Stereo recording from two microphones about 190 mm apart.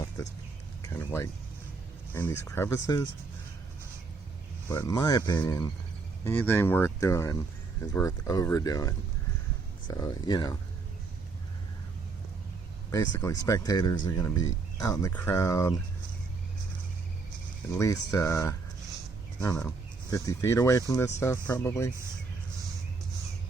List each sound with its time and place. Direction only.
0.8 s a sound: 15° left (ahead or behind)
2.1 s speech: 10° left (ahead or behind)
4.7 s speech: 15° left (ahead or behind)
12.9 s speech: 15° left (ahead or behind)
17.7 s speech: 15° left (ahead or behind)